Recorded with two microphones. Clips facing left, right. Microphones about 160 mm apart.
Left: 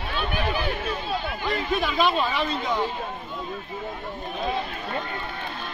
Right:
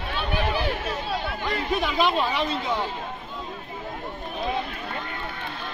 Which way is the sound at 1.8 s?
20° right (ahead or behind).